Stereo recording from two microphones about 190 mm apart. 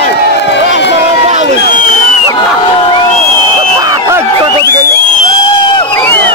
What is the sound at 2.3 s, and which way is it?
Crowd, 25° left (ahead or behind).